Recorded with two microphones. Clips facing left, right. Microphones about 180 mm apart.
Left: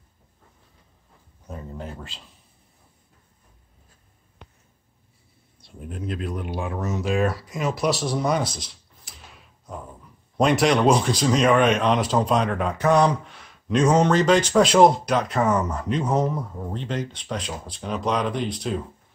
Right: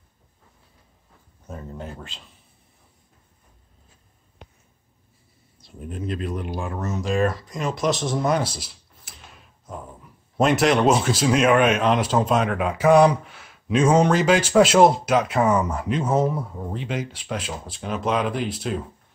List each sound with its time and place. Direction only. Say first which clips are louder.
1.5 s speech: even; centre (ahead or behind)
5.7 s speech: right 2 dB; centre (ahead or behind)